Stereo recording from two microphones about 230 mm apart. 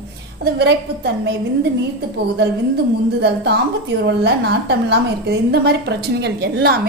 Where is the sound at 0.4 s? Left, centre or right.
Right.